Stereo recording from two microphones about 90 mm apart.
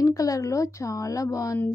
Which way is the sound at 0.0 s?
40° left (ahead or behind).